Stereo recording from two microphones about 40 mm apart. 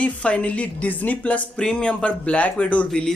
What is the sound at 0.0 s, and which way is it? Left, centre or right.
Speech, left.